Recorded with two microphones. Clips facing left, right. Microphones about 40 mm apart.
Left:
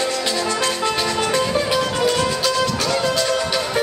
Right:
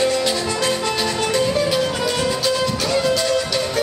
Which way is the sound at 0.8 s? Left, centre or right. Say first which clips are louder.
Left 1 dB; centre.